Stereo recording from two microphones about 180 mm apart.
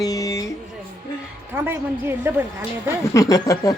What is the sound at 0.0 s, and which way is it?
Music, 20° left (ahead or behind).